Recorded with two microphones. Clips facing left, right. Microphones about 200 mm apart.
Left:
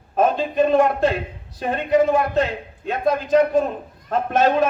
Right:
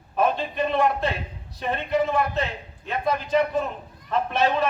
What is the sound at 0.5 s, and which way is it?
A man's voice, 45° left (ahead or behind).